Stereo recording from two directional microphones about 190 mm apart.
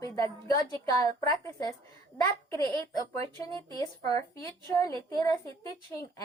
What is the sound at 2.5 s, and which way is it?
A woman's voice, 15° left (ahead or behind).